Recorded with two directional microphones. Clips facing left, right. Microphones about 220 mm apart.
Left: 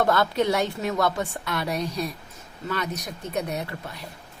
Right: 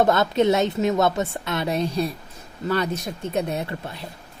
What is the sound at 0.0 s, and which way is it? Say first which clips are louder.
A woman's voice: right 4 dB; 20° right (ahead or behind).